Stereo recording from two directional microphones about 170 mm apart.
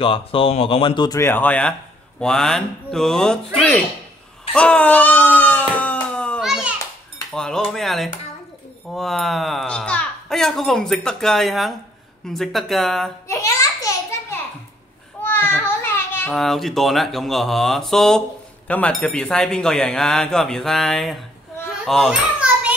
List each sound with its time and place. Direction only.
0.0 s speech: 30° left (ahead or behind); by 3.8 s 5° left (ahead or behind)
4.5 s baby cry: 5° left (ahead or behind)
7.3 s cutlery: 5° left (ahead or behind)
8.9 s a sound: centre (ahead or behind)
12.3 s speech: centre (ahead or behind)
13.3 s a sound: 20° left (ahead or behind)
16.3 s speech: centre (ahead or behind)
21.8 s children playing: centre (ahead or behind)